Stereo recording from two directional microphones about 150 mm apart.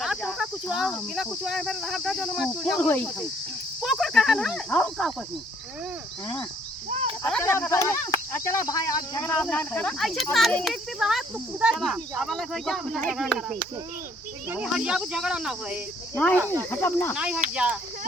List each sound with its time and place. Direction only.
0.0 s cricket: centre (ahead or behind)
1.1 s speech: centre (ahead or behind)
7.2 s speech: 10° left (ahead or behind)
9.2 s speech: 10° left (ahead or behind)
14.5 s speech: 5° right (ahead or behind)
16.1 s speech: 10° left (ahead or behind)
16.4 s speech: 20° right (ahead or behind)
16.6 s speech: 15° left (ahead or behind)
17.2 s speech: 5° right (ahead or behind)